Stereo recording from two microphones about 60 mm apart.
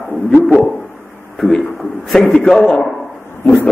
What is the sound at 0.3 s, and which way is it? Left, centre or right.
Dog, left.